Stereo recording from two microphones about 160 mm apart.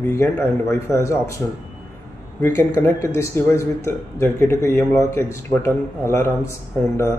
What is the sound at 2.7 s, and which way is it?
Speech, 15° left (ahead or behind).